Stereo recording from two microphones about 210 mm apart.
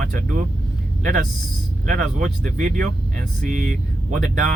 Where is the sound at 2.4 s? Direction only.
40° right (ahead or behind).